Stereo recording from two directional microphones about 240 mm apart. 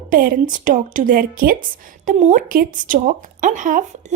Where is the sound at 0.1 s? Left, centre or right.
Right.